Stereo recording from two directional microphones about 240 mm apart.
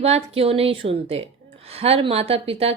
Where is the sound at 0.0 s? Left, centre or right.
Right.